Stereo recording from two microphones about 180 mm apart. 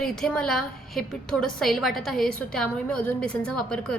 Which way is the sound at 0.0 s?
5° left (ahead or behind).